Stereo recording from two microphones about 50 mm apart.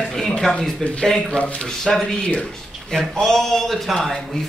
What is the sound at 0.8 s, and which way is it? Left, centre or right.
Speech, left.